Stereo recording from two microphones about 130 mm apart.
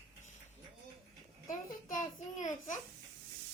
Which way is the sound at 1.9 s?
70° left (ahead or behind).